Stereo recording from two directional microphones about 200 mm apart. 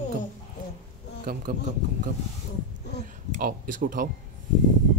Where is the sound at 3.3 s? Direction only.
45° right (ahead or behind).